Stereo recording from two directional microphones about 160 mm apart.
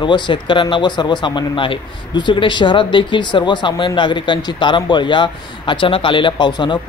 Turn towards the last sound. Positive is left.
turn(degrees=30)  # may be behind; listen again after turning